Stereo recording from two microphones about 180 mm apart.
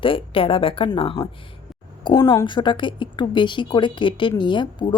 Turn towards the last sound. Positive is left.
turn(degrees=25)  # may be behind; listen again after turning